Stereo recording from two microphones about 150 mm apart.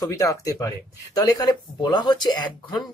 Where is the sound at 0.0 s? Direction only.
20° left (ahead or behind).